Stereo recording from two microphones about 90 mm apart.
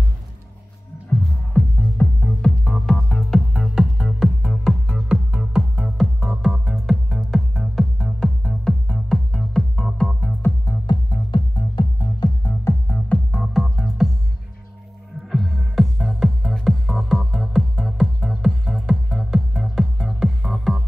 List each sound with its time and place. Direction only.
1.5 s music: 10° left (ahead or behind)
10.9 s music: 55° left (ahead or behind)
12.4 s music: 35° left (ahead or behind)
13.3 s music: 5° left (ahead or behind)
15.2 s music: centre (ahead or behind)